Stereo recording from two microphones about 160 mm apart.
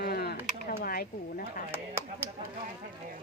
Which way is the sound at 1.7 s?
15° right (ahead or behind).